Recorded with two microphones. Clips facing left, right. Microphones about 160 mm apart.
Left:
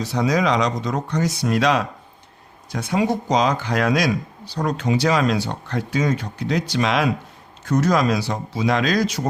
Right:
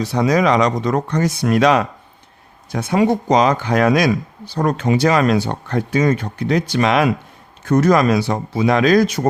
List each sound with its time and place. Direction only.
0.0 s speech: 60° right (ahead or behind)